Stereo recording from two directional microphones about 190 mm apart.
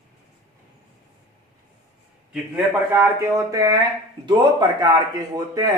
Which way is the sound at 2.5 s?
15° right (ahead or behind).